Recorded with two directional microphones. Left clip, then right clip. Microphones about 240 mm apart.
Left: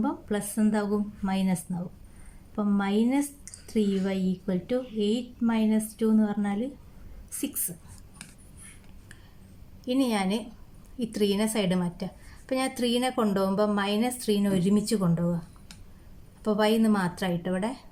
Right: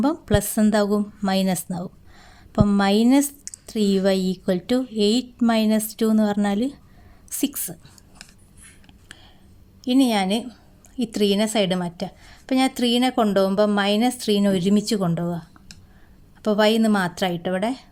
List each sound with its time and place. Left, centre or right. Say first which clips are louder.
0.0 s a woman's voice: right 9 dB; right
9.8 s a woman's voice: right 7 dB; right